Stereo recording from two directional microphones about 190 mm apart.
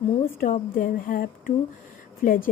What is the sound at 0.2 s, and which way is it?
A woman's voice, 40° left (ahead or behind).